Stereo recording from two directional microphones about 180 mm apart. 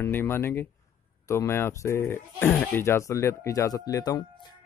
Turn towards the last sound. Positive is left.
turn(degrees=25)  # may be behind; listen again after turning